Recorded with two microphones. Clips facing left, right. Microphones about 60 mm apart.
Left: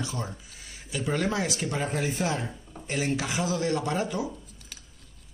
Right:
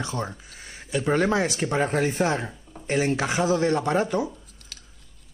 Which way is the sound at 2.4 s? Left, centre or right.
Centre.